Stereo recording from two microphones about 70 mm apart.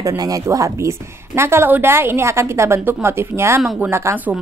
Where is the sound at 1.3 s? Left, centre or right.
Right.